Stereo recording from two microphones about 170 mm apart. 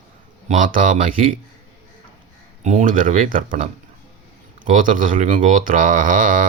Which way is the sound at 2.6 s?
45° right (ahead or behind).